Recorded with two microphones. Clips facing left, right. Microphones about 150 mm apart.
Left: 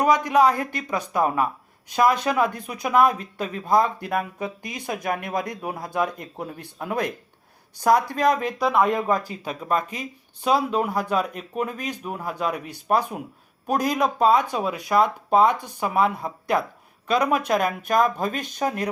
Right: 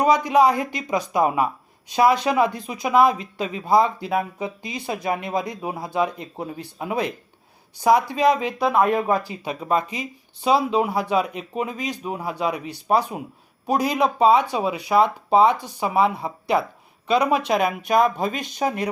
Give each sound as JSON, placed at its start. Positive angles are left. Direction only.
{"t": 0.1, "sound": "speech", "side_deg": -10}
{"t": 8.5, "sound": "speech", "side_deg": -25}
{"t": 9.0, "sound": "speech", "side_deg": -5}